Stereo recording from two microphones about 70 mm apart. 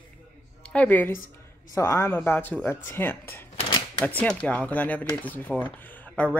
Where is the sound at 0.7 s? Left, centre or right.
Left.